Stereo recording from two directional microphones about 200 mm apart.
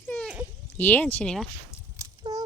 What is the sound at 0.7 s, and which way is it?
Speech, 10° left (ahead or behind).